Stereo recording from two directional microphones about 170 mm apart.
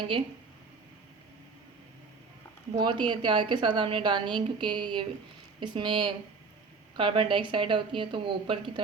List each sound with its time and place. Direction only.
2.7 s a woman's voice: 30° right (ahead or behind)